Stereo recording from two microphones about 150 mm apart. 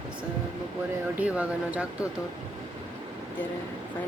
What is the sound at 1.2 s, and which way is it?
Speech, 10° right (ahead or behind).